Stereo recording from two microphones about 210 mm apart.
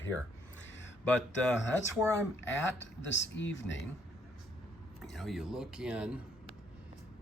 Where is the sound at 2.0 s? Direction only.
15° right (ahead or behind).